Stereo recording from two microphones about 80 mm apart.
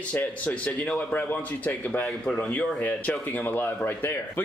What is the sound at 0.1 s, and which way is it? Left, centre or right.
A man's voice, centre.